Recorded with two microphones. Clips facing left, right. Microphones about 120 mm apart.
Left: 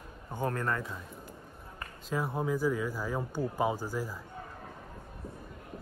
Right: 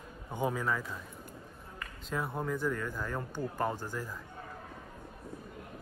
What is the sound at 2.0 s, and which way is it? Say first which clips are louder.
Speech: left 3 dB; centre (ahead or behind).